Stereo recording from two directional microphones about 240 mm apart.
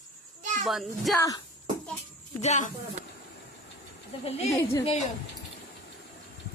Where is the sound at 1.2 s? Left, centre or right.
Centre.